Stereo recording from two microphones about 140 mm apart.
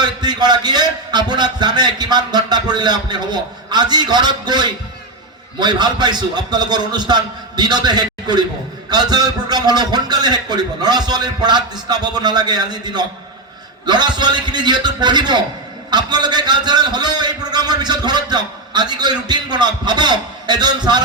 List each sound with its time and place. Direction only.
0.0 s a man's voice: 30° right (ahead or behind)